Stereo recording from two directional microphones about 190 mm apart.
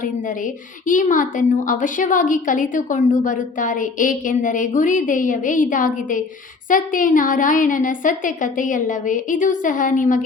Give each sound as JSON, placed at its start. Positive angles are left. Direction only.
{"t": 0.9, "sound": "a woman's voice", "side_deg": 45}